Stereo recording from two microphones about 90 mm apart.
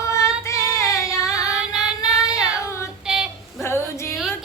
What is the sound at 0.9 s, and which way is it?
Child singing, 35° left (ahead or behind).